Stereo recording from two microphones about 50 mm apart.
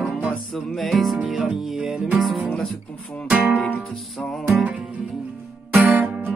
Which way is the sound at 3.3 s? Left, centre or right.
Right.